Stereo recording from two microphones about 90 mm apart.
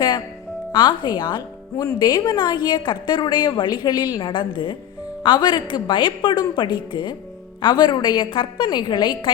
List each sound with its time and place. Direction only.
0.7 s a woman's voice: 55° left (ahead or behind)